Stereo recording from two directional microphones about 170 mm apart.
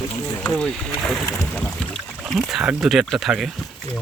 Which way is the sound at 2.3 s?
Centre (ahead or behind).